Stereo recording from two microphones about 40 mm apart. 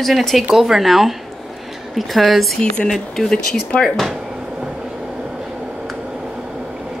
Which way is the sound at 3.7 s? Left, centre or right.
Left.